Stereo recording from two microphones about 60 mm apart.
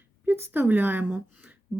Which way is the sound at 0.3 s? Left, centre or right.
Right.